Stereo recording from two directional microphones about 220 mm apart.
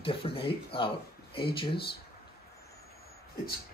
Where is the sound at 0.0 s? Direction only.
25° left (ahead or behind).